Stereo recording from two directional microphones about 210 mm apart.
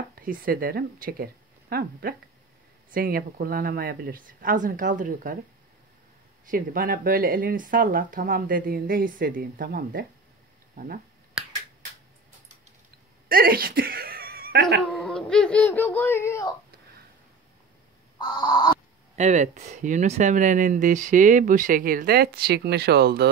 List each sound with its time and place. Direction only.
0.2 s a woman's voice: 45° right (ahead or behind)
6.5 s speech: 40° right (ahead or behind)
11.4 s finger snapping: 5° right (ahead or behind)
13.3 s a sound: 45° right (ahead or behind)
14.9 s a sound: centre (ahead or behind)
18.2 s crow: 20° left (ahead or behind)
19.1 s speech: 35° right (ahead or behind); by 23.2 s 50° right (ahead or behind)